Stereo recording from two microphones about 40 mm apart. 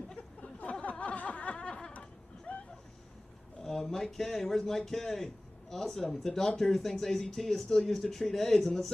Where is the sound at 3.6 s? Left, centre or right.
Centre.